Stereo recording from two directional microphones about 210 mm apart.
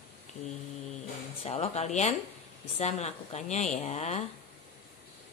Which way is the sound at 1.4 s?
30° left (ahead or behind).